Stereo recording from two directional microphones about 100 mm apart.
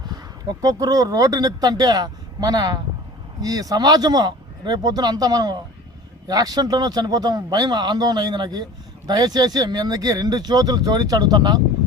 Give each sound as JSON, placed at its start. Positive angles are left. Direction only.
{"t": 0.0, "sound": "speech", "side_deg": -45}